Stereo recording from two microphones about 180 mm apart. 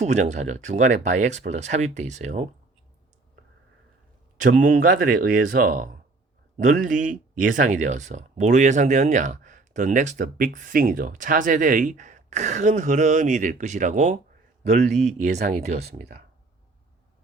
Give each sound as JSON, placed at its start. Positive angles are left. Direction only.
{"t": 0.0, "sound": "speech", "side_deg": -40}
{"t": 4.4, "sound": "speech", "side_deg": -50}
{"t": 16.0, "sound": "speech", "side_deg": -55}